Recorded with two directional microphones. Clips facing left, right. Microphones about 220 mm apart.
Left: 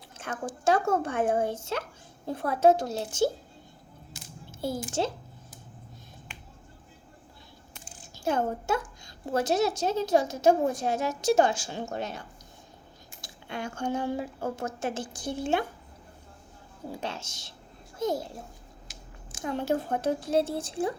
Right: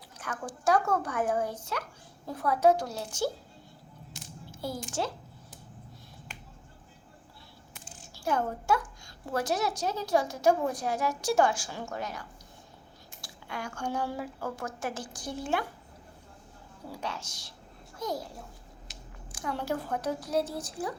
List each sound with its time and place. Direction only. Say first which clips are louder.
0.2 s speech: left 2 dB; 25° left (ahead or behind)
4.9 s speech: left 3 dB; 25° left (ahead or behind)
7.7 s a sound: right 1 dB; centre (ahead or behind)
8.1 s a woman's voice: left 3 dB; 25° left (ahead or behind)
13.2 s speech: left 3 dB; 25° left (ahead or behind)
16.9 s speech: left 2 dB; 25° left (ahead or behind)
19.3 s speech: left 4 dB; 25° left (ahead or behind)